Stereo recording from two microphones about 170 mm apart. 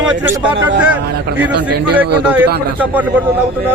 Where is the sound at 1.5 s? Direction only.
90° right.